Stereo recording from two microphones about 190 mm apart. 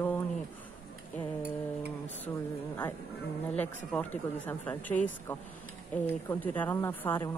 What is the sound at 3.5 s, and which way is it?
Speech, 10° left (ahead or behind).